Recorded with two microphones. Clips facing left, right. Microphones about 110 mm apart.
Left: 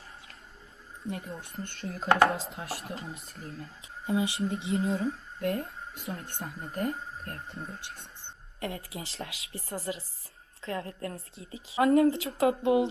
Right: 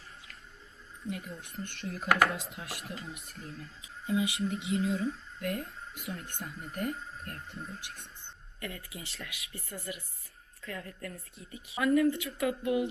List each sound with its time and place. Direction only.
1.4 s a woman's voice: 30° left (ahead or behind)